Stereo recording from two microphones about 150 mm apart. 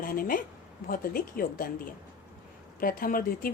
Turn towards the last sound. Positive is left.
turn(degrees=70)  # may be behind; listen again after turning